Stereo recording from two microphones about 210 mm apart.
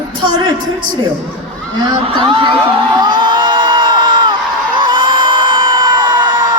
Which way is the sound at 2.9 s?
20° right (ahead or behind).